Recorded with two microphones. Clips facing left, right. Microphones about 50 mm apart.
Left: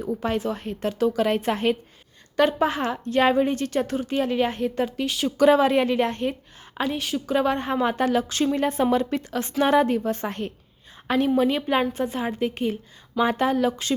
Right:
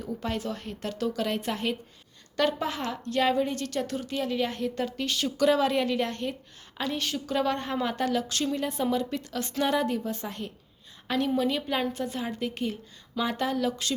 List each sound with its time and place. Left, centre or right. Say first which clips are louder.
0.0 s a woman's voice: left 6 dB; left
5.4 s a woman's voice: left 6 dB; left
8.6 s a woman's voice: left 6 dB; left
10.0 s a woman's voice: left 7 dB; left
11.3 s a woman's voice: left 6 dB; left